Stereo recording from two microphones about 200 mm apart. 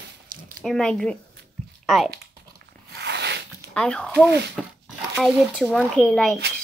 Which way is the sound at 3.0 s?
55° right (ahead or behind).